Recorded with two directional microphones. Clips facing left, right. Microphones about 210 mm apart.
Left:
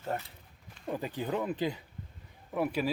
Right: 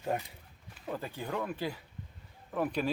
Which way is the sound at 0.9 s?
15° left (ahead or behind).